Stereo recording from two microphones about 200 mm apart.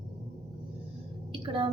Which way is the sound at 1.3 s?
25° right (ahead or behind).